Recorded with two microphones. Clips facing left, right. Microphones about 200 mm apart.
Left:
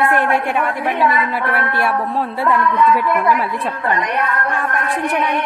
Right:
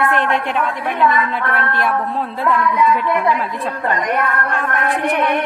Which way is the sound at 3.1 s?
20° right (ahead or behind).